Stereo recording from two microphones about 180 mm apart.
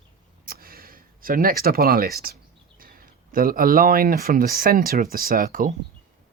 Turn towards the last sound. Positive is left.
turn(degrees=-50)  # may be behind; listen again after turning